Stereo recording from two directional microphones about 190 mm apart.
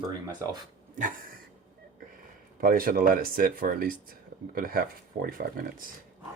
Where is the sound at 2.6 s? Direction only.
50° right (ahead or behind).